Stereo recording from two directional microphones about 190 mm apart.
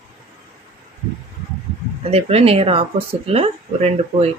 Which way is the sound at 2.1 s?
30° right (ahead or behind).